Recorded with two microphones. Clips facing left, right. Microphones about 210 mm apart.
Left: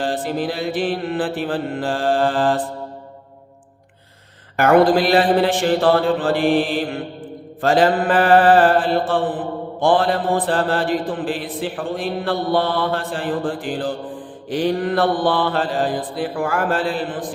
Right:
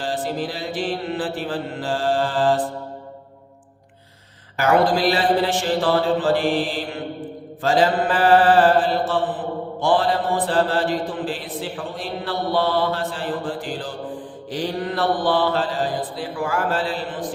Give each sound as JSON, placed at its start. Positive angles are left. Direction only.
{"t": 0.0, "sound": "mantra", "side_deg": 55}
{"t": 4.5, "sound": "mantra", "side_deg": 55}
{"t": 7.6, "sound": "mantra", "side_deg": 55}